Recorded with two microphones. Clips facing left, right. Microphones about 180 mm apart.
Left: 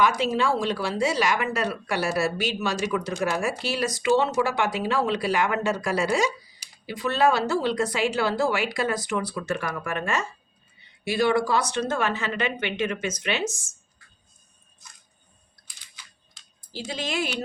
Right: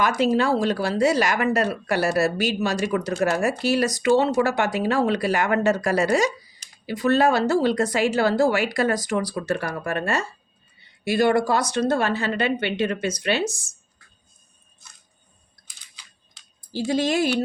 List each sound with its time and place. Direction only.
0.2 s a woman's voice: 40° right (ahead or behind)
11.2 s a woman's voice: 45° right (ahead or behind)
16.9 s a woman's voice: 40° right (ahead or behind)